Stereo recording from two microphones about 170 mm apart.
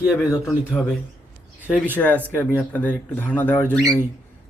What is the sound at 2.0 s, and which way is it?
A man's voice, 10° left (ahead or behind).